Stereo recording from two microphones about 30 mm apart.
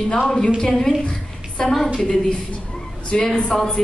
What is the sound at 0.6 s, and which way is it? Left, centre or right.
A woman's voice, centre.